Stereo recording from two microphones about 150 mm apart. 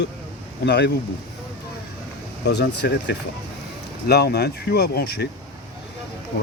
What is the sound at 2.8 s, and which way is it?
Speech, 90° left.